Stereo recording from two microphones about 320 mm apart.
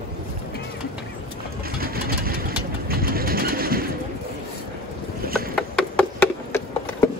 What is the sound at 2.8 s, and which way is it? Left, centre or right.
Bird, right.